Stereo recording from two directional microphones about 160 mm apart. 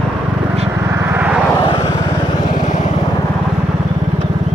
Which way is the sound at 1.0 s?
10° right (ahead or behind).